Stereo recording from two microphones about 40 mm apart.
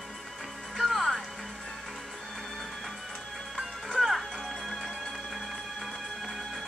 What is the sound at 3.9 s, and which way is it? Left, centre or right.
Music, centre.